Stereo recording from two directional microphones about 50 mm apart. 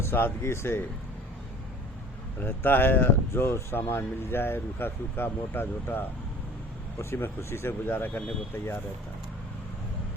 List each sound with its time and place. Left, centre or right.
0.0 s speech: left
2.4 s speech: left
7.0 s speech: left